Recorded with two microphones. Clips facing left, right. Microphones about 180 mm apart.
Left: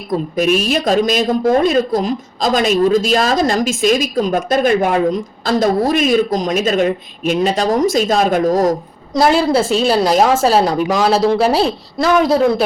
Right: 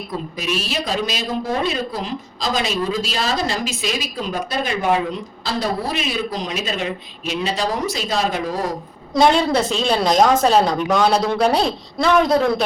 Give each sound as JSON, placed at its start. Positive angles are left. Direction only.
{"t": 0.3, "sound": "a woman's voice", "side_deg": 50}
{"t": 9.1, "sound": "a woman's voice", "side_deg": 5}